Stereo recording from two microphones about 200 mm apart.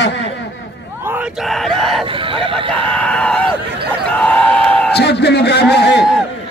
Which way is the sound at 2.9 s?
5° left (ahead or behind).